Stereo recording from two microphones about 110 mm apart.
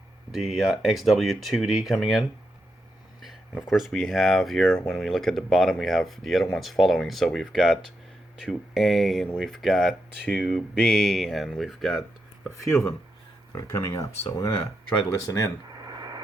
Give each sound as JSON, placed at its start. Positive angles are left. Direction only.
{"t": 0.3, "sound": "speech", "side_deg": -5}
{"t": 3.7, "sound": "speech", "side_deg": 0}
{"t": 12.5, "sound": "speech", "side_deg": 30}
{"t": 15.8, "sound": "radio", "side_deg": -35}